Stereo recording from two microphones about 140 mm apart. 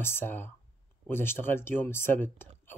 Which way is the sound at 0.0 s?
15° left (ahead or behind).